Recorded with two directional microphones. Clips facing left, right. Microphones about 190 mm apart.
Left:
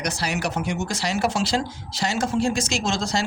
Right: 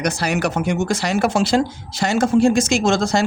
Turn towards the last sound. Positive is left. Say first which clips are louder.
# right 8 dB
turn(degrees=-50)  # may be behind; listen again after turning